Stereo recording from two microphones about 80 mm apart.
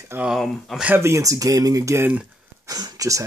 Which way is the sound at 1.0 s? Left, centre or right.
Right.